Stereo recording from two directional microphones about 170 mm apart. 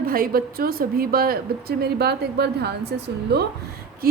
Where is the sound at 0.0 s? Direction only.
60° right (ahead or behind).